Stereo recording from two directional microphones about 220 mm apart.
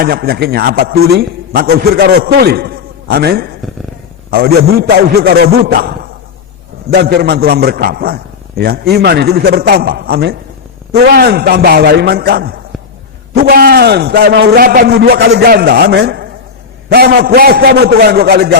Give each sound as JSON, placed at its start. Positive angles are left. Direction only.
{"t": 0.0, "sound": "a man's voice", "side_deg": -45}